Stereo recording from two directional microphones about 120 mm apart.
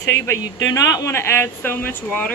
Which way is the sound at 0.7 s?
30° left (ahead or behind).